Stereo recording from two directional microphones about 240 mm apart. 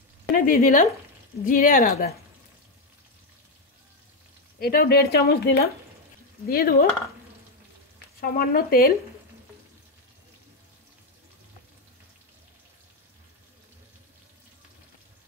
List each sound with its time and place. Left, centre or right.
0.3 s speech: left
4.6 s speech: left
8.2 s speech: left